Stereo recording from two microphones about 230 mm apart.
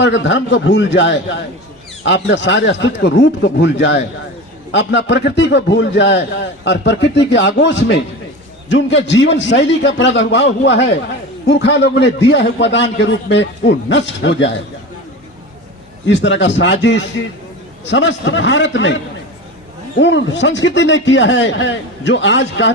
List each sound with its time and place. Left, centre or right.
0.0 s a man's voice: left
16.0 s a man's voice: left
20.0 s a man's voice: left